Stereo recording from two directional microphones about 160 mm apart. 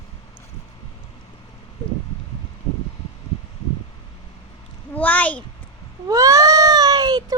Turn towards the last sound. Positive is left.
turn(degrees=-25)  # may be behind; listen again after turning